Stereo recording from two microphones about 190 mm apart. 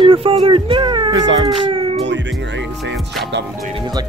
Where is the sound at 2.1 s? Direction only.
70° right (ahead or behind).